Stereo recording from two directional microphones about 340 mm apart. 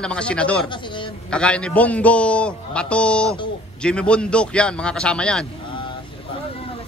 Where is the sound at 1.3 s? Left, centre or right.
Centre.